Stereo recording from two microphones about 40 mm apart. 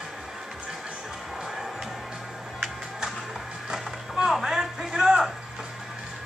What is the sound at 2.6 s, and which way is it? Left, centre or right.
Music, centre.